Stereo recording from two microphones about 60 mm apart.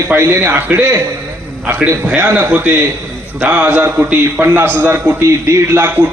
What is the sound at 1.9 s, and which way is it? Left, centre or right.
A man's voice, right.